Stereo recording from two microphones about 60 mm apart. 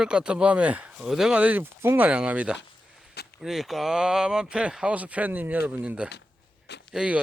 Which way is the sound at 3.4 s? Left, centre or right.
Centre.